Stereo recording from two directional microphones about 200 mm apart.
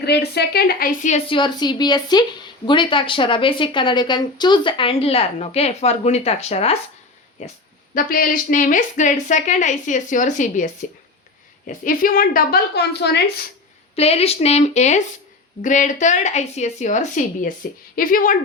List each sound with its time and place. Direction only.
0.0 s a woman's voice: 55° left (ahead or behind); by 7.5 s 35° left (ahead or behind)
7.9 s a woman's voice: 45° left (ahead or behind)
13.9 s a woman's voice: 30° left (ahead or behind)